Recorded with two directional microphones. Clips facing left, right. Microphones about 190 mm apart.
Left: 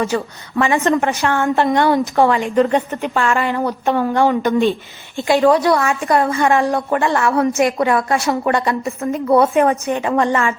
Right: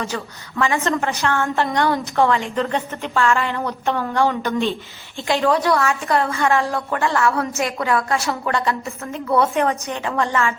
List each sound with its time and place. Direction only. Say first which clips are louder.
0.1 s a woman's voice: left 6 dB; 20° left (ahead or behind)